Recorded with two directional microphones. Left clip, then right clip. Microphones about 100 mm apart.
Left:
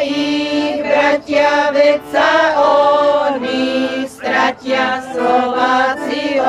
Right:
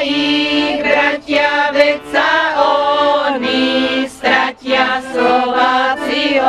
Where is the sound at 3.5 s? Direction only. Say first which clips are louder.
Right 2 dB; 40° left (ahead or behind).